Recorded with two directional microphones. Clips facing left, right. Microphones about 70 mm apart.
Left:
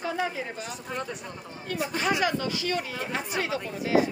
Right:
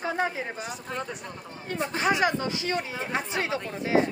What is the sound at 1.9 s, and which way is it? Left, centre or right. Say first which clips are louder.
Speech: right 2 dB; right.